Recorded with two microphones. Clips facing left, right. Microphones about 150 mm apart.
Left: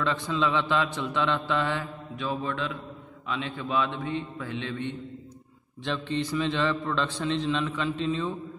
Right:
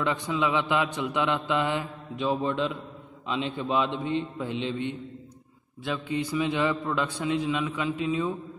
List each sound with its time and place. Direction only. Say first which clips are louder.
0.0 s a man's voice: even; 15° right (ahead or behind)
2.1 s a man's voice: right 4 dB; 25° right (ahead or behind)